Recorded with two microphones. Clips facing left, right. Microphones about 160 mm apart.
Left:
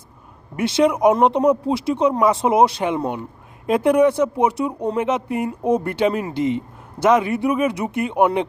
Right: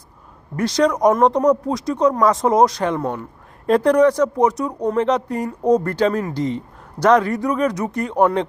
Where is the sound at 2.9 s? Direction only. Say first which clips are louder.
Even; 15° left (ahead or behind).